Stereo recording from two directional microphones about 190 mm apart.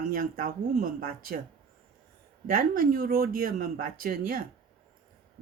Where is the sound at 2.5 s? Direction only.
45° right (ahead or behind).